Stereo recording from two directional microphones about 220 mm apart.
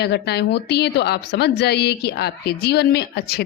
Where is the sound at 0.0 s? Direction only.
50° left (ahead or behind).